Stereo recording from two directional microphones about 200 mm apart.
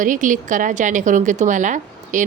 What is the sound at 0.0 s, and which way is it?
A woman's voice, 40° right (ahead or behind).